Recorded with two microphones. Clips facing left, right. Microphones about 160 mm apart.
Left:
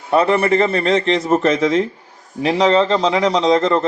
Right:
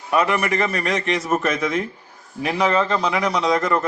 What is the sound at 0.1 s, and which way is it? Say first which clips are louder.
A man's voice: left 5 dB; 30° left (ahead or behind).